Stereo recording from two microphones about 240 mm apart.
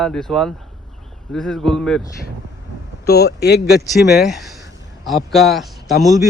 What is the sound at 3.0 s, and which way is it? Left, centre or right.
Speech, left.